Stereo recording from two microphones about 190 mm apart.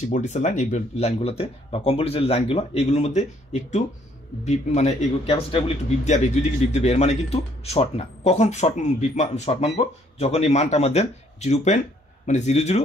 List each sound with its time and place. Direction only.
0.1 s speech: 40° left (ahead or behind)